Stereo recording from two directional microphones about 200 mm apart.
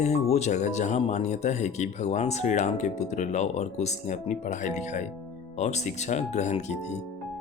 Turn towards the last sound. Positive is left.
turn(degrees=35)  # may be behind; listen again after turning